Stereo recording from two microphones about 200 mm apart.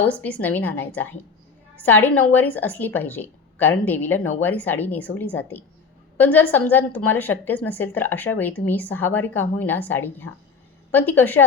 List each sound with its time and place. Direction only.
0.1 s a woman's voice: 10° left (ahead or behind)